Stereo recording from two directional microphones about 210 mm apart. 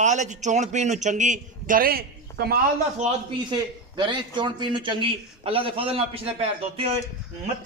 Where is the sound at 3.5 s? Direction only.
20° right (ahead or behind).